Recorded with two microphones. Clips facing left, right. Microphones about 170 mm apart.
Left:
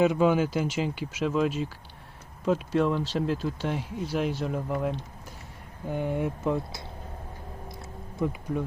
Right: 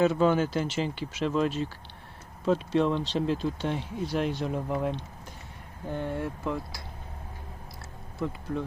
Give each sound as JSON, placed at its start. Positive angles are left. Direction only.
{"t": 0.0, "sound": "speech", "side_deg": 15}
{"t": 8.2, "sound": "speech", "side_deg": 15}